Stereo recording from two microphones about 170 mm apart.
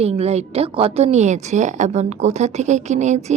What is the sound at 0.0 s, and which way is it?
Speech, 35° right (ahead or behind).